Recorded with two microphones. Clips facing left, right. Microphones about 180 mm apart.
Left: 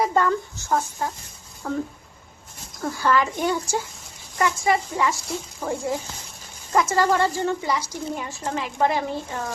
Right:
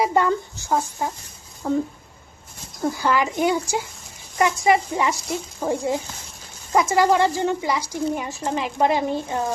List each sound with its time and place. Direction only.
0.0 s a woman's voice: 15° right (ahead or behind)
3.0 s a woman's voice: 15° right (ahead or behind)